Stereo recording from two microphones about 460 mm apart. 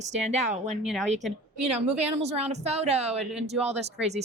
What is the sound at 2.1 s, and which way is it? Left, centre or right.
A woman's voice, centre.